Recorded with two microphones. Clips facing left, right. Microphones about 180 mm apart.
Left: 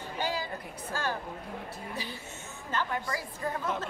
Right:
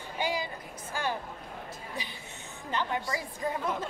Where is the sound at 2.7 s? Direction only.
15° right (ahead or behind).